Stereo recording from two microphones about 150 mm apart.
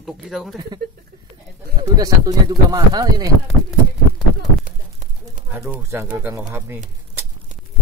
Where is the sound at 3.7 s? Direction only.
Centre (ahead or behind).